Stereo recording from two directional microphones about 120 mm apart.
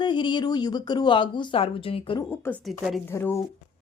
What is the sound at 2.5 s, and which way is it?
Speech, 20° left (ahead or behind).